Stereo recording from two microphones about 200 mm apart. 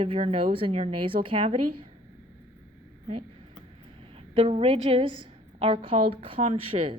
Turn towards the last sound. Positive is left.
turn(degrees=-30)  # may be behind; listen again after turning